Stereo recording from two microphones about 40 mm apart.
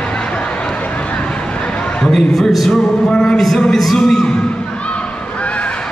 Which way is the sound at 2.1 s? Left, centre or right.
Centre.